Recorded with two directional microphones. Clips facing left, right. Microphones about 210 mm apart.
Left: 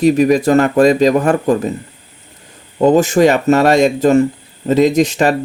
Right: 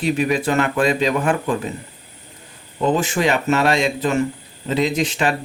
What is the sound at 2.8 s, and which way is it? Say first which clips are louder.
Speech: left 9 dB; 45° left (ahead or behind).